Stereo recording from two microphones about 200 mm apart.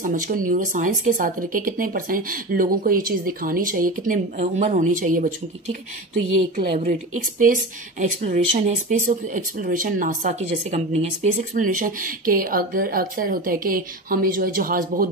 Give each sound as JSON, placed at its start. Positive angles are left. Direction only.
{"t": 0.0, "sound": "speech", "side_deg": -40}
{"t": 6.8, "sound": "speech", "side_deg": -40}